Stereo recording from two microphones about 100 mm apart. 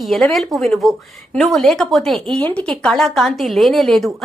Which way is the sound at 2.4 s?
15° left (ahead or behind).